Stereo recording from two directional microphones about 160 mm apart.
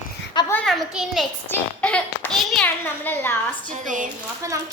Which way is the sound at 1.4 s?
10° left (ahead or behind).